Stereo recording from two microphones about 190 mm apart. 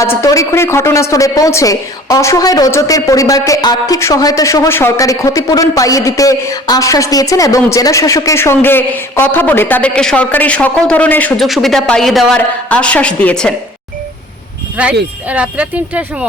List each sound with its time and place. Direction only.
0.2 s a woman's voice: 15° left (ahead or behind)
14.8 s speech: 5° right (ahead or behind)